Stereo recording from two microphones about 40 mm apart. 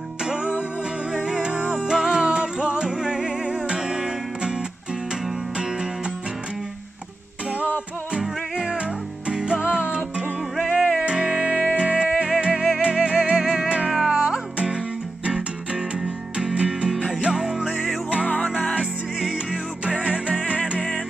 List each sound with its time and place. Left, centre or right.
0.2 s music: centre
8.2 s music: centre
8.7 s music: right
11.6 s music: right
16.9 s music: centre
17.3 s music: centre
18.3 s music: left
19.8 s music: right